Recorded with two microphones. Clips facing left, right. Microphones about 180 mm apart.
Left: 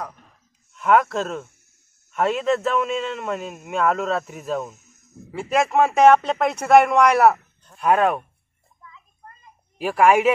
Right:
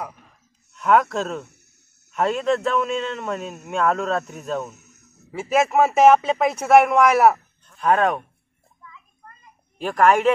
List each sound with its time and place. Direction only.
0.0 s sigh: 10° right (ahead or behind)
0.7 s a man's voice: centre (ahead or behind)
1.4 s a sound: 70° right (ahead or behind)
2.0 s a man's voice: centre (ahead or behind)
4.7 s a sound: 70° right (ahead or behind)
5.3 s a man's voice: centre (ahead or behind)
9.8 s a woman's voice: 10° left (ahead or behind)